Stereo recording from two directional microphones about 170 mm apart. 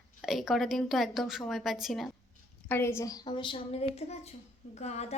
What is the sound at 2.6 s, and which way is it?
A woman's voice, 15° left (ahead or behind).